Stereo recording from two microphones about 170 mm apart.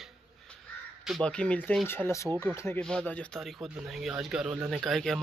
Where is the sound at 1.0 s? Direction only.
5° left (ahead or behind).